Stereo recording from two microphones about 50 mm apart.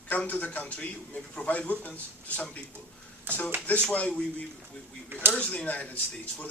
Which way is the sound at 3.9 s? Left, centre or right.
Left.